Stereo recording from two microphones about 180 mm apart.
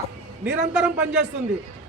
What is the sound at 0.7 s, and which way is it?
Speech, 5° right (ahead or behind).